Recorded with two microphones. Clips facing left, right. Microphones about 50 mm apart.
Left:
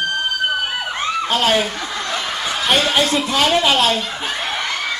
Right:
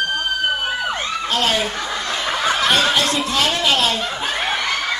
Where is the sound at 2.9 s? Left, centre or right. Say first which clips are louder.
Left 2 dB; centre.